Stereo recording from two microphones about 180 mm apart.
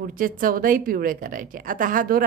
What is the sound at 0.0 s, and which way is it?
A woman's voice, 50° right (ahead or behind).